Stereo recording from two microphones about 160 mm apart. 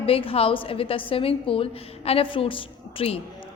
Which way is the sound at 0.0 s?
35° left (ahead or behind).